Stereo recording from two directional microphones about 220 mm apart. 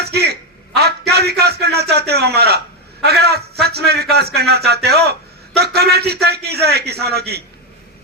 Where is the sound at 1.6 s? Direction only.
45° right (ahead or behind).